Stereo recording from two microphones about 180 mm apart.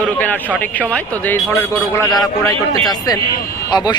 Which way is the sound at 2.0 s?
20° left (ahead or behind).